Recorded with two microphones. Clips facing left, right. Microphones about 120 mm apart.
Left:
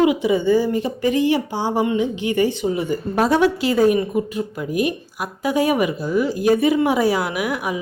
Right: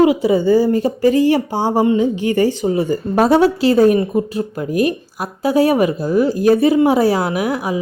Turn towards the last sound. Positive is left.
turn(degrees=-30)  # may be behind; listen again after turning